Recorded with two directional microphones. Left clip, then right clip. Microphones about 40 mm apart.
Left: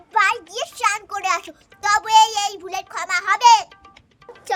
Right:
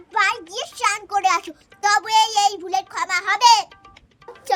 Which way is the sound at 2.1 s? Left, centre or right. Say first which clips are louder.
Left 5 dB; left.